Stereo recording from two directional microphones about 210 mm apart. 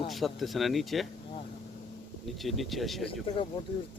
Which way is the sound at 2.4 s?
Centre (ahead or behind).